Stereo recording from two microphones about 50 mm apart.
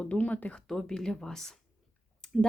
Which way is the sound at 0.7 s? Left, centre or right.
Centre.